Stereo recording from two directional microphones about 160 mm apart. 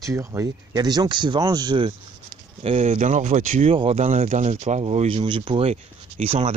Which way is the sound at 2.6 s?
40° right (ahead or behind).